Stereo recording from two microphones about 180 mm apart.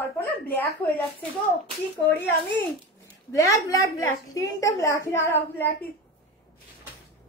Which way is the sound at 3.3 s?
20° left (ahead or behind).